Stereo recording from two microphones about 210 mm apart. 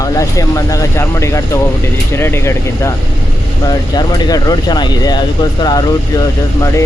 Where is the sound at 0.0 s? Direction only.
15° left (ahead or behind).